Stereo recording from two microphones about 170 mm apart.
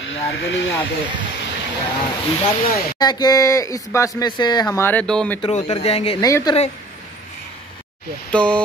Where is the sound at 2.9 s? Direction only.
25° left (ahead or behind); by 5.4 s 5° left (ahead or behind).